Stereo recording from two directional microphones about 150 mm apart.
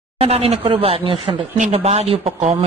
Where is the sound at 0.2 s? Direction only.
40° right (ahead or behind).